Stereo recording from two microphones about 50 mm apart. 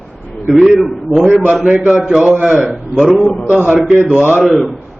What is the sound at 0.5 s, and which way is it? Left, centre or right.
Speech, centre.